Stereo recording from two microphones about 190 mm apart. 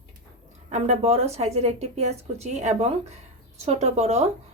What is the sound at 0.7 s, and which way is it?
Speech, 35° right (ahead or behind).